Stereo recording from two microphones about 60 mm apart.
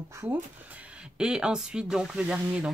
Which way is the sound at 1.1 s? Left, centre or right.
Centre.